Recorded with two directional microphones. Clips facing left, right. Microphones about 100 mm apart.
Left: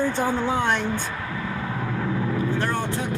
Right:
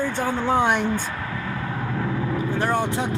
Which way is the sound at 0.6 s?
10° right (ahead or behind).